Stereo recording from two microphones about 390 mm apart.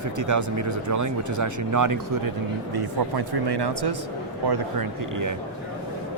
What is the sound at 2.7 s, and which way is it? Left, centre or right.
Speech, right.